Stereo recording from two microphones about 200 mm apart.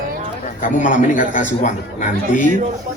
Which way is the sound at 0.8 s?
40° left (ahead or behind).